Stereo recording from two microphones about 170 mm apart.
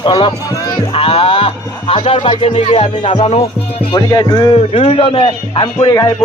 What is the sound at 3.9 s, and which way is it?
Speech, 20° left (ahead or behind).